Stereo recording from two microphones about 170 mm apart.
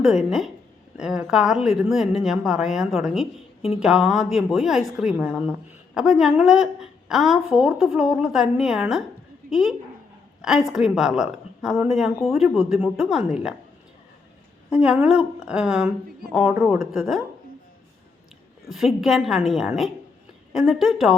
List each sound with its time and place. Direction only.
0.0 s speech: centre (ahead or behind)
14.7 s speech: 5° right (ahead or behind)
18.7 s speech: centre (ahead or behind)